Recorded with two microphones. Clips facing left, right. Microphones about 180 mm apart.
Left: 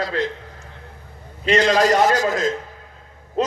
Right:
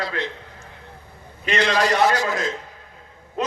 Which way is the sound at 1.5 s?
45° left (ahead or behind).